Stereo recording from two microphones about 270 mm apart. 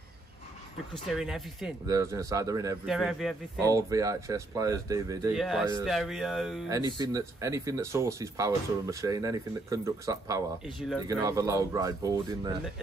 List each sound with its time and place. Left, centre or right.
1.1 s speech: centre
1.9 s speech: centre
2.9 s speech: centre
3.5 s speech: centre
5.4 s speech: centre
6.7 s speech: centre